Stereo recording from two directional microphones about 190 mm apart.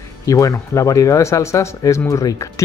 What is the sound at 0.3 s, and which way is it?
Speech, 15° left (ahead or behind).